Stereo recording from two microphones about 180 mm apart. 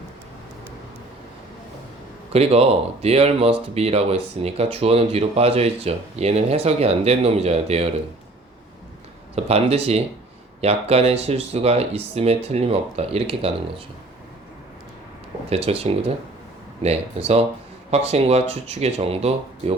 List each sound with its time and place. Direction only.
2.3 s speech: 35° right (ahead or behind)
9.3 s speech: 35° right (ahead or behind)
15.4 s speech: 35° right (ahead or behind)